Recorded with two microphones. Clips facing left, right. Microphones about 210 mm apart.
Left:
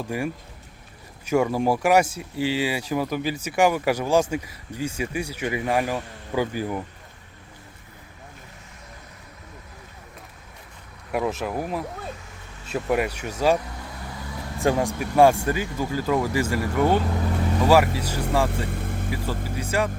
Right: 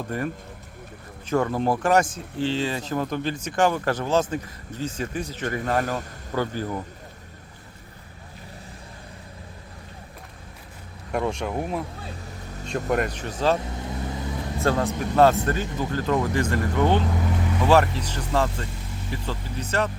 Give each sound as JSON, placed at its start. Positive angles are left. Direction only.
{"t": 0.1, "sound": "speech", "side_deg": 10}
{"t": 11.1, "sound": "speech", "side_deg": 5}
{"t": 12.9, "sound": "speech", "side_deg": 5}
{"t": 13.6, "sound": "vehicle", "side_deg": -25}
{"t": 14.6, "sound": "speech", "side_deg": 15}
{"t": 18.6, "sound": "vehicle", "side_deg": 55}
{"t": 19.1, "sound": "speech", "side_deg": 10}